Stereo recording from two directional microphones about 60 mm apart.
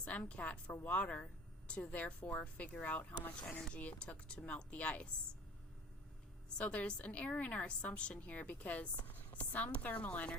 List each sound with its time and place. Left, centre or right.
0.0 s a woman's voice: left
6.6 s a woman's voice: left